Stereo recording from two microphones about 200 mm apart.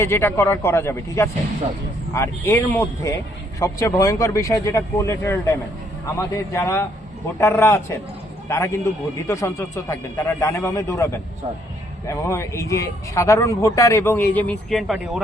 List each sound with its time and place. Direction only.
0.0 s a man's voice: 10° left (ahead or behind)